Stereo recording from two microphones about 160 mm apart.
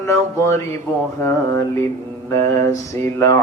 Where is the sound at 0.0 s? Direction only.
15° left (ahead or behind).